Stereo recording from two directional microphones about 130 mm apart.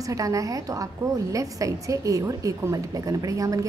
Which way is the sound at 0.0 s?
25° right (ahead or behind).